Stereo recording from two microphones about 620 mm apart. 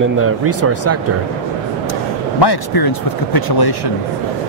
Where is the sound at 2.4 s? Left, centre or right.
Left.